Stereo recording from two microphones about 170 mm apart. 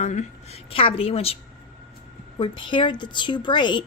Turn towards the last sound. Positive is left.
turn(degrees=25)  # may be behind; listen again after turning